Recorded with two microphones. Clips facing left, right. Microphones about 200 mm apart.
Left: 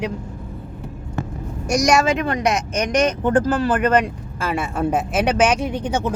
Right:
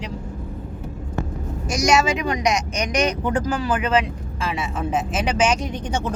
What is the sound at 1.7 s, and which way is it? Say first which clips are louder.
Speech: left 2 dB; 60° left (ahead or behind).